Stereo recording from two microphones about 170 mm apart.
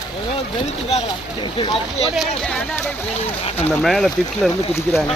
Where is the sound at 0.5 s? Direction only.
40° left (ahead or behind).